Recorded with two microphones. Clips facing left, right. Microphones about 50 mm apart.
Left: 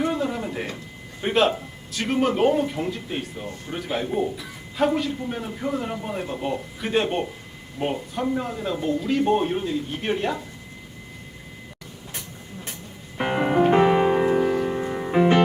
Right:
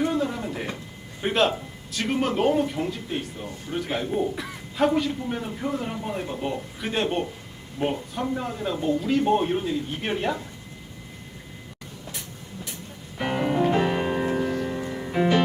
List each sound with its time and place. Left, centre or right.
0.0 s a sound: centre
1.2 s speech: centre
13.1 s music: left